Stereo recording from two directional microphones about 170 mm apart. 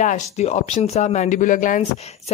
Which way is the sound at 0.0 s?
45° left (ahead or behind).